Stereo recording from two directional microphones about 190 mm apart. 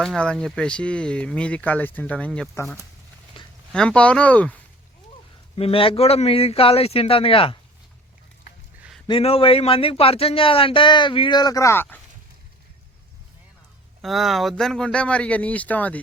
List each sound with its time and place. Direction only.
0.0 s speech: 5° left (ahead or behind)
3.3 s a sound: 25° left (ahead or behind)
3.7 s speech: 5° left (ahead or behind)
5.5 s a man's voice: 30° left (ahead or behind)
9.0 s speech: 30° left (ahead or behind); by 11.9 s 10° left (ahead or behind)
14.0 s speech: centre (ahead or behind)